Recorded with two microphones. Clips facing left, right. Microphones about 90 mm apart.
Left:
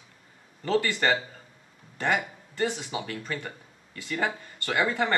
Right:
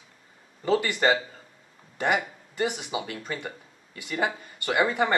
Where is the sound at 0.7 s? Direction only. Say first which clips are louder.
Right 2 dB; 15° right (ahead or behind).